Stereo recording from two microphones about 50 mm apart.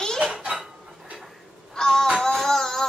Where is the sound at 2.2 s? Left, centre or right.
Centre.